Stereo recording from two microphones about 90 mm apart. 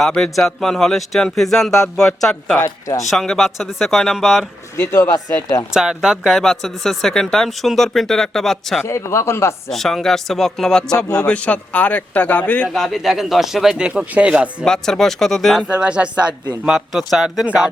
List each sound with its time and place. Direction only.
0.0 s speech: 5° left (ahead or behind)
2.6 s speech: 35° left (ahead or behind)
3.0 s speech: centre (ahead or behind)
4.8 s speech: 30° left (ahead or behind)
5.7 s speech: 5° right (ahead or behind)
8.8 s speech: 30° left (ahead or behind)
9.6 s a man's voice: 5° left (ahead or behind)
12.6 s speech: centre (ahead or behind)
14.6 s speech: 5° left (ahead or behind)
15.6 s speech: 10° right (ahead or behind)
16.6 s speech: centre (ahead or behind)
17.4 s speech: 15° right (ahead or behind)